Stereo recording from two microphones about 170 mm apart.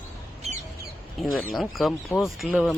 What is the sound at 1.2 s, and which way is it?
Speech, centre (ahead or behind).